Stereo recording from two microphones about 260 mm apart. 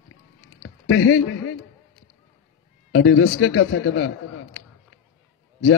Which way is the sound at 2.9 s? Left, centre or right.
Left.